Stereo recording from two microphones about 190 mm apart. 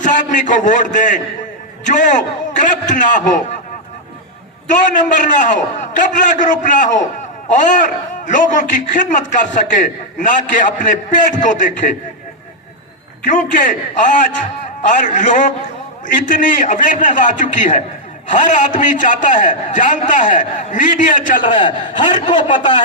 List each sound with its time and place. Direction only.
0.0 s a man's voice: 40° left (ahead or behind)
4.7 s a man's voice: 40° left (ahead or behind)
13.3 s a man's voice: 45° left (ahead or behind)
21.4 s a man's voice: 25° left (ahead or behind)